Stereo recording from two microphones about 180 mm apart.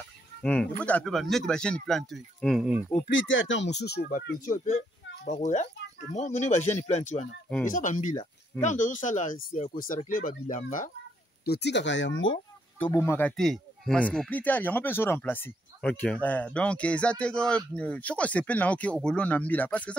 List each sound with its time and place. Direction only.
0.4 s speech: 5° left (ahead or behind)
3.1 s speech: 90° left; by 10.9 s 45° left (ahead or behind)
11.4 s speech: 65° left (ahead or behind); by 12.4 s 90° left
12.7 s speech: 10° left (ahead or behind)
13.4 s speech: centre (ahead or behind)